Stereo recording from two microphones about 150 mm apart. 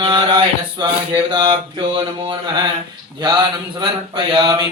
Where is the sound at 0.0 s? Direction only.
35° right (ahead or behind).